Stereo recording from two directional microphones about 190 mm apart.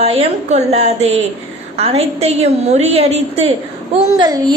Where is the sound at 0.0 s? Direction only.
30° right (ahead or behind).